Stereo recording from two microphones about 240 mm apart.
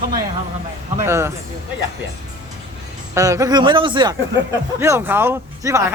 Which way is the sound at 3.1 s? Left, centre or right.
Centre.